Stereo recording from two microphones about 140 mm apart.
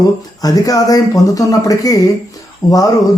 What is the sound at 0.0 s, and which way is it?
Speech, 25° left (ahead or behind).